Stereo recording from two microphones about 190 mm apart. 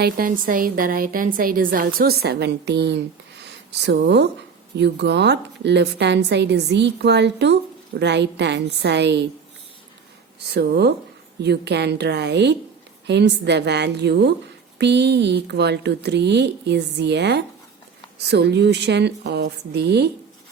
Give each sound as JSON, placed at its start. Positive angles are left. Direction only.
{"t": 0.0, "sound": "a woman's voice", "side_deg": -50}
{"t": 10.4, "sound": "speech", "side_deg": -60}